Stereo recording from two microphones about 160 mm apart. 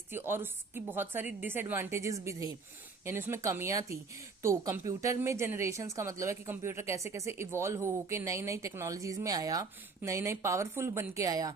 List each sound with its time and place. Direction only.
0.1 s speech: 15° right (ahead or behind)